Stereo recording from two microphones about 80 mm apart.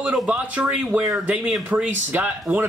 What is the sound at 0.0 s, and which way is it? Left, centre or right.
Speech, centre.